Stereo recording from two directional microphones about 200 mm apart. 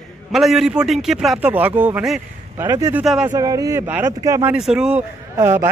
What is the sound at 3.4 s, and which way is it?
A man's voice, 15° right (ahead or behind).